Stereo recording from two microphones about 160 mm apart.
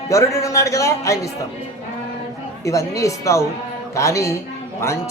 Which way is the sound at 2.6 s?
20° left (ahead or behind).